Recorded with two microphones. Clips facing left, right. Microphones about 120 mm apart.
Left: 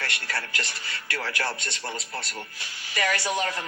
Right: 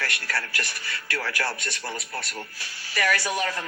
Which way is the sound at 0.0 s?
20° left (ahead or behind).